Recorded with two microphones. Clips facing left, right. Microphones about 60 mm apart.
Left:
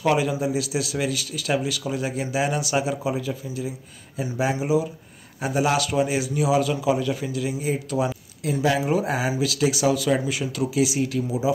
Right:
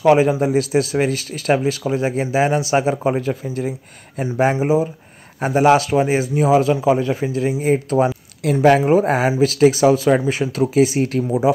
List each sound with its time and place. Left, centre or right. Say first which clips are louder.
0.0 s speech: right 8 dB; right
8.4 s speech: right 9 dB; right